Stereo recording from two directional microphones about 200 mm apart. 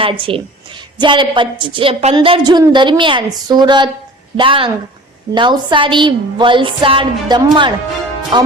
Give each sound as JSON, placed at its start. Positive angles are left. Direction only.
{"t": 0.0, "sound": "a woman's voice", "side_deg": -25}